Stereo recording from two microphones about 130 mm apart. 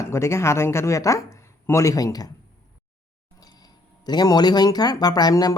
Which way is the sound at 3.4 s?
30° left (ahead or behind).